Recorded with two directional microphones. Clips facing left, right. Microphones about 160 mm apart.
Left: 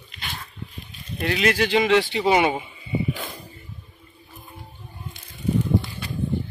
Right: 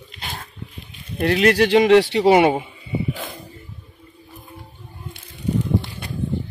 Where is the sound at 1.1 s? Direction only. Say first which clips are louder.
Right 6 dB; 50° right (ahead or behind).